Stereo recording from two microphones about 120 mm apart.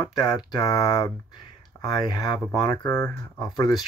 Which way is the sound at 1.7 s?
25° left (ahead or behind).